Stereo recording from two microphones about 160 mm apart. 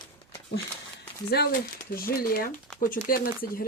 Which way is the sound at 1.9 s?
65° left (ahead or behind).